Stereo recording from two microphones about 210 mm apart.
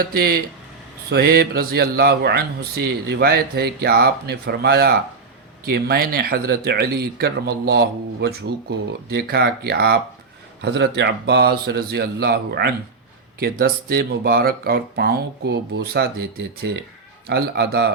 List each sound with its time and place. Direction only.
0.0 s speech: 45° right (ahead or behind)